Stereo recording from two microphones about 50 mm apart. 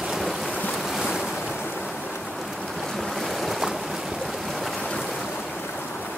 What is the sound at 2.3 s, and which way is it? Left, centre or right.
Boat, centre.